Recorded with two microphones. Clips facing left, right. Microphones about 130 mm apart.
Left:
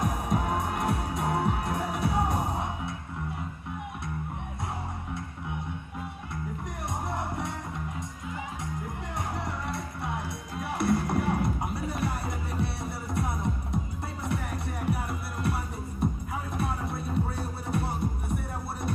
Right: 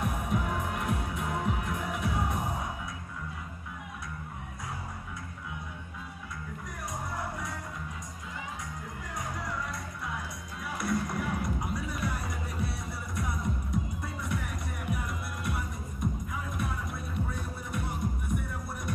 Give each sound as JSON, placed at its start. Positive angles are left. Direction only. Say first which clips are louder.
{"t": 0.0, "sound": "music", "louder": "left 3 dB", "side_deg": 35}
{"t": 7.2, "sound": "music", "louder": "left 4 dB", "side_deg": 25}
{"t": 9.4, "sound": "music", "louder": "left 3 dB", "side_deg": 25}
{"t": 14.9, "sound": "music", "louder": "left 3 dB", "side_deg": 30}